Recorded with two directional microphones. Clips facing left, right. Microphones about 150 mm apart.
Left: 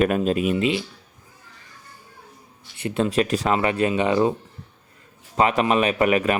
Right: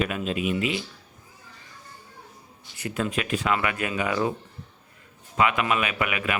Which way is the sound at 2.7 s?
25° left (ahead or behind).